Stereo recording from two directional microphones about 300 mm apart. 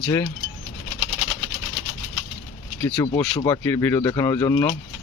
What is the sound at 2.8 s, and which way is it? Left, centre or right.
Speech, centre.